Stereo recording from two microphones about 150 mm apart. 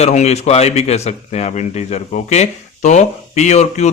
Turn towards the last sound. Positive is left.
turn(degrees=50)  # may be behind; listen again after turning